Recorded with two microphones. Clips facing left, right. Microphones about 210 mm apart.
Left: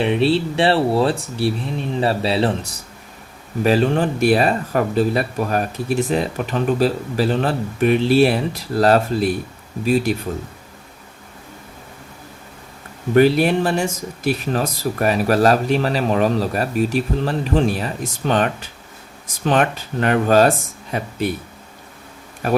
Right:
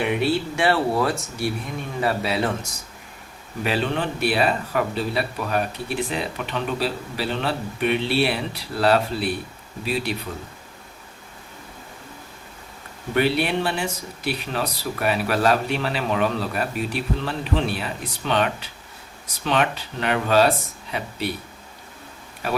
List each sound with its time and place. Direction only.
0.0 s speech: 30° left (ahead or behind)
3.6 s speech: 40° left (ahead or behind)
13.1 s speech: 40° left (ahead or behind)
22.4 s speech: 45° left (ahead or behind)